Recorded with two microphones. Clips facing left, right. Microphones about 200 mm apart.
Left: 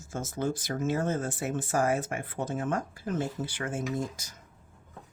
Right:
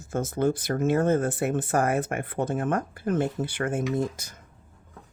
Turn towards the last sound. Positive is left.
turn(degrees=-55)  # may be behind; listen again after turning